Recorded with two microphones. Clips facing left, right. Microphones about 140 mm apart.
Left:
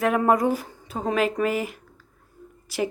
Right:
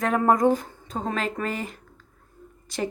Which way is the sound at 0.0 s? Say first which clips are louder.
Even; 10° left (ahead or behind).